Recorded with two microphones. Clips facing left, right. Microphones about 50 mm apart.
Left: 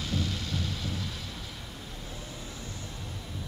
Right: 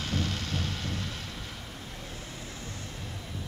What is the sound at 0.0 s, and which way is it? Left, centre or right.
Music, right.